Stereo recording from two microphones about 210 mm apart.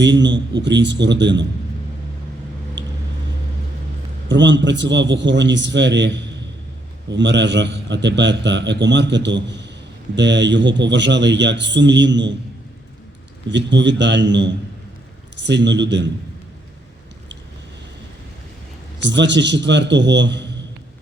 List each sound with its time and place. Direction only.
0.0 s a man's voice: 55° right (ahead or behind)
4.3 s a man's voice: 60° right (ahead or behind)
13.5 s a man's voice: 55° right (ahead or behind)
18.9 s a man's voice: 55° right (ahead or behind)